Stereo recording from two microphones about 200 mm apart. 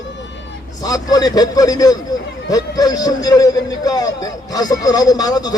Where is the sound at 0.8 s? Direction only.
20° left (ahead or behind).